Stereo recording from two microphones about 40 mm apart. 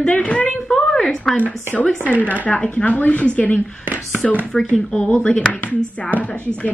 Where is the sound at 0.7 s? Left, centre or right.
Centre.